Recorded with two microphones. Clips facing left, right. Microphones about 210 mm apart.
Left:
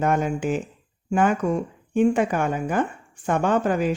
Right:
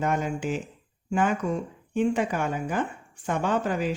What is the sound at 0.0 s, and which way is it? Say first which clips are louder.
Speech: left 4 dB; 50° left (ahead or behind).